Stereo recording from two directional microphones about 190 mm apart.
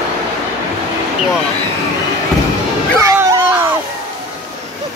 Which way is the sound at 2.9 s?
15° right (ahead or behind).